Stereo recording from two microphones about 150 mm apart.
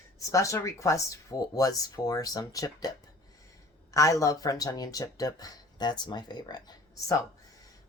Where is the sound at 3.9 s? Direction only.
20° left (ahead or behind).